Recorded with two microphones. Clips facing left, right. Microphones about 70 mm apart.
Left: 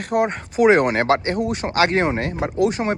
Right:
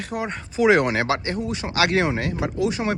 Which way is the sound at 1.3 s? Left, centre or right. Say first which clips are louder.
Left 4 dB; left.